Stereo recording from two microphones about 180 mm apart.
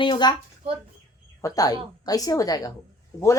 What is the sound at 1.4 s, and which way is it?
A woman's voice, 20° left (ahead or behind).